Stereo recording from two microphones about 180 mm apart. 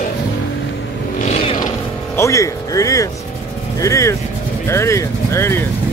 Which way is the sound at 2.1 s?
15° left (ahead or behind).